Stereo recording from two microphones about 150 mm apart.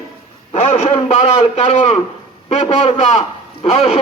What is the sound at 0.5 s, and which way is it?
A man's voice, 45° left (ahead or behind).